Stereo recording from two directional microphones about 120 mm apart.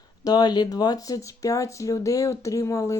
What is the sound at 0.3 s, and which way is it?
Speech, 35° left (ahead or behind).